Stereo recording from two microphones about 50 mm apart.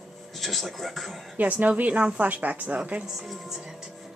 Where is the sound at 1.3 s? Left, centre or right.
Right.